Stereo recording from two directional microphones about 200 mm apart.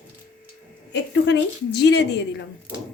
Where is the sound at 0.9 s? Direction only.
60° left (ahead or behind).